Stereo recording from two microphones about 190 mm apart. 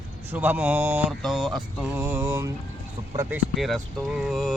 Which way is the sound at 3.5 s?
Centre (ahead or behind).